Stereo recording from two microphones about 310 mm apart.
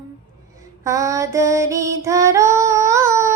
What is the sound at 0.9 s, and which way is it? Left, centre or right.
Female singing, centre.